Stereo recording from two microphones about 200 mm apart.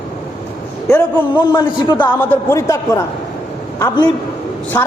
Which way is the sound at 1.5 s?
25° left (ahead or behind).